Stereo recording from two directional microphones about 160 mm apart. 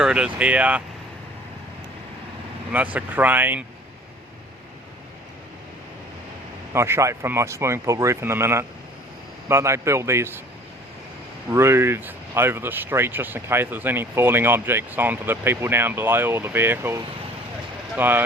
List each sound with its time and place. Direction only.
0.0 s speech: 5° right (ahead or behind)
2.7 s speech: 10° right (ahead or behind)
6.7 s speech: 15° right (ahead or behind)
11.5 s speech: 15° right (ahead or behind)